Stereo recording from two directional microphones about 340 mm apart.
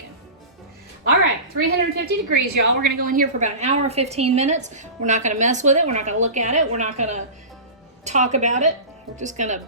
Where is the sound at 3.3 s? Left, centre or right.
Centre.